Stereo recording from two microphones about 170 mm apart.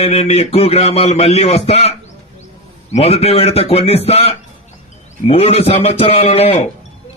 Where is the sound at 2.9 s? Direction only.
35° left (ahead or behind).